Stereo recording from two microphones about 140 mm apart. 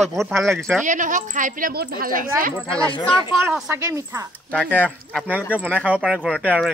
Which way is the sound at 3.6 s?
20° right (ahead or behind).